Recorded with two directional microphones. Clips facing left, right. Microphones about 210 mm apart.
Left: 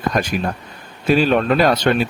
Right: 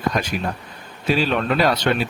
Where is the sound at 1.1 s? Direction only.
45° left (ahead or behind).